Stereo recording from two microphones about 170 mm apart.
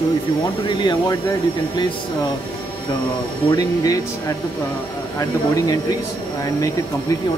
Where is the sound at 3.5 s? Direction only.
20° left (ahead or behind).